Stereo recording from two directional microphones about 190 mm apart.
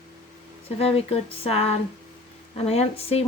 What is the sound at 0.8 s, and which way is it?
A woman's voice, 30° left (ahead or behind).